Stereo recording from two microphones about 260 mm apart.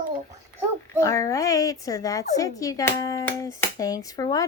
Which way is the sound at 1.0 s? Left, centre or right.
Centre.